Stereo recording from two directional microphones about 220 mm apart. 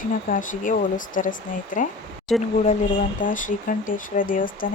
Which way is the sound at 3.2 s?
35° left (ahead or behind).